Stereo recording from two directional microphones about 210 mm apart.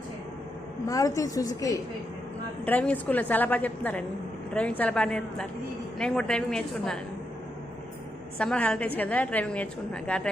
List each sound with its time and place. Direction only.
0.9 s a woman's voice: 15° left (ahead or behind)
8.4 s a woman's voice: 5° left (ahead or behind)